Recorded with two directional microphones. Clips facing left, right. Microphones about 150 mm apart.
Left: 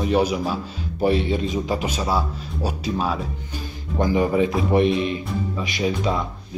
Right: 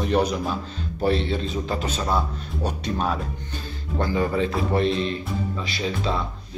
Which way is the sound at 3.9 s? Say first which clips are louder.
Left 4 dB; 15° left (ahead or behind).